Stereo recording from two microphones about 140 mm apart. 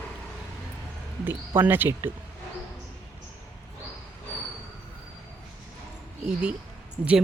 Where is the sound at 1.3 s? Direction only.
15° right (ahead or behind).